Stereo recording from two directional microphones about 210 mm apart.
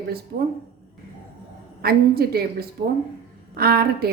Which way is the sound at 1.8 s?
45° right (ahead or behind).